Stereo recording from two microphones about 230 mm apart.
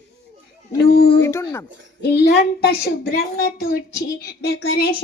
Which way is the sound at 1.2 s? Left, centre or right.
Centre.